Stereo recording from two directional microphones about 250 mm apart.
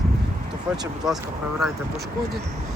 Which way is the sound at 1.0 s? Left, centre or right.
Centre.